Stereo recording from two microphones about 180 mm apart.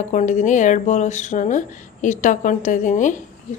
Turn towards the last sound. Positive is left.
turn(degrees=45)  # may be behind; listen again after turning